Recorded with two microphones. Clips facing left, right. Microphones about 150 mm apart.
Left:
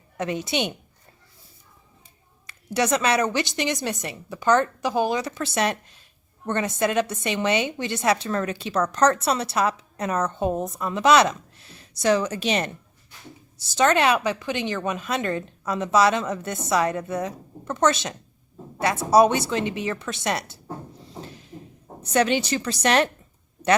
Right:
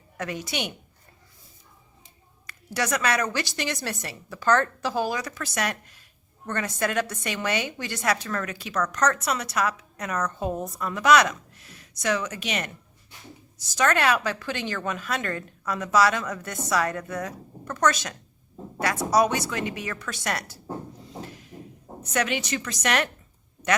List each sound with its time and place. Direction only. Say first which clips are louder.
0.2 s a woman's voice: left 5 dB; 25° left (ahead or behind)
2.5 s a woman's voice: left 5 dB; 25° left (ahead or behind)
22.0 s a woman's voice: left 6 dB; 30° left (ahead or behind)